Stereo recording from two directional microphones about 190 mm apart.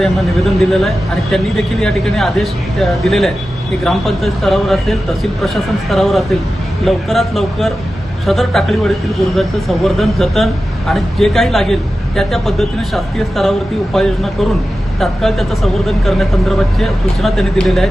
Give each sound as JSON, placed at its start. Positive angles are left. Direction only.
{"t": 0.6, "sound": "speech", "side_deg": 0}